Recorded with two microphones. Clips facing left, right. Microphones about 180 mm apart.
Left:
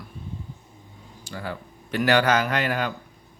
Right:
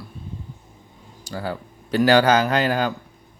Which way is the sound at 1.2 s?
35° right (ahead or behind).